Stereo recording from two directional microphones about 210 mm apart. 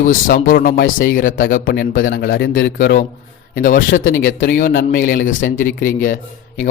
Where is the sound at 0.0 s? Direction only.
40° left (ahead or behind).